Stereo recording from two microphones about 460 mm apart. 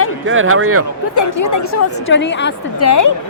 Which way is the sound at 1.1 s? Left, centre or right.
Left.